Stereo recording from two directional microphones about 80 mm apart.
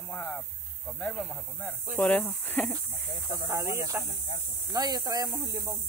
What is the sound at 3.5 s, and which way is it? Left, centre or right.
Speech, right.